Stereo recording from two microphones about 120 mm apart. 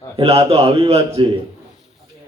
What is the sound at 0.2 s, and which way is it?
Speech, 55° right (ahead or behind).